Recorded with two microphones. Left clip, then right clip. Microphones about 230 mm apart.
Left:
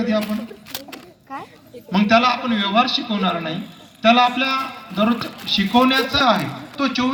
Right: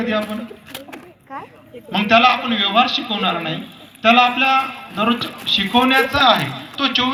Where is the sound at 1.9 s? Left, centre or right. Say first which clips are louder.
Right 3 dB; left.